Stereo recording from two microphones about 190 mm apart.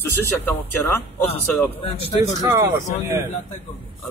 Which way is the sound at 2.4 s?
15° right (ahead or behind).